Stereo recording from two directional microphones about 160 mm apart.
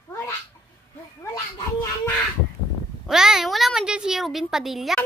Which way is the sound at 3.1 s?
5° right (ahead or behind).